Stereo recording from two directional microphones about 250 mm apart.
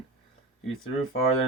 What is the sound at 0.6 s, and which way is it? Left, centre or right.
Speech, left.